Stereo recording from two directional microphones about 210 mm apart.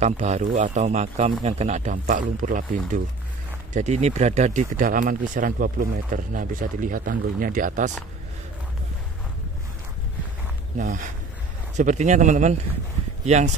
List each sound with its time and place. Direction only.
0.0 s speech: 35° right (ahead or behind)
10.8 s speech: 35° right (ahead or behind)